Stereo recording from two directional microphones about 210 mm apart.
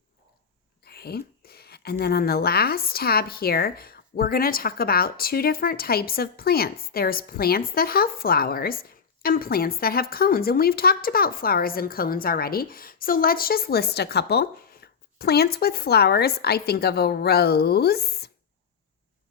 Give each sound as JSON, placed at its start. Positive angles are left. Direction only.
{"t": 0.9, "sound": "speech", "side_deg": 50}